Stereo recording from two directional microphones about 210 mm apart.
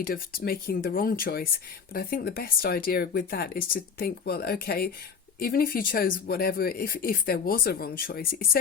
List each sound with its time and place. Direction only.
0.1 s speech: 45° left (ahead or behind)